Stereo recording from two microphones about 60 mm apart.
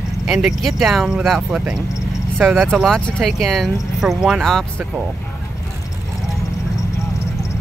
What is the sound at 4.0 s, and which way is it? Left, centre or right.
Speech, centre.